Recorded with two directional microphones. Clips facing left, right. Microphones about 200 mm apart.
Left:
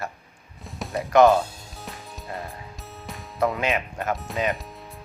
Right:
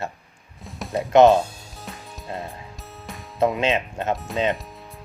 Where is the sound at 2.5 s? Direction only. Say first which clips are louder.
Even; centre (ahead or behind).